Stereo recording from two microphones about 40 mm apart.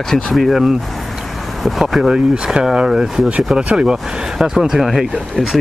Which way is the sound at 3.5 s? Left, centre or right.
Right.